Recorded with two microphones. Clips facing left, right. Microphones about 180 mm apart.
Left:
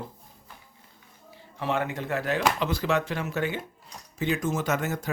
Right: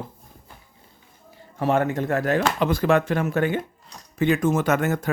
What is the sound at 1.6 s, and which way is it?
Speech, 45° right (ahead or behind).